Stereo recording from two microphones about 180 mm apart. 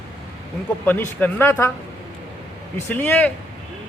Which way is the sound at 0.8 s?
10° left (ahead or behind).